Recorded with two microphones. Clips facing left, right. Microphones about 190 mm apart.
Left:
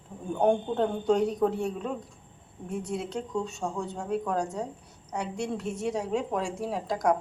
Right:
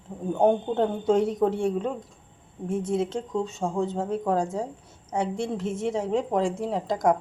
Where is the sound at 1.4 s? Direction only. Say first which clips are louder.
Right 3 dB; 25° right (ahead or behind).